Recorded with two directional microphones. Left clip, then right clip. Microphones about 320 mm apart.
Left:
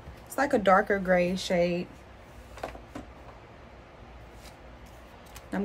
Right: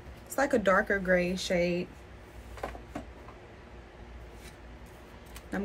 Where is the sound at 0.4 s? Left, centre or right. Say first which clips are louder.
Left 3 dB; centre.